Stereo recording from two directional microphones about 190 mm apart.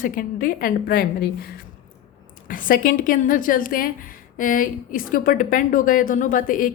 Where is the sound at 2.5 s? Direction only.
45° left (ahead or behind).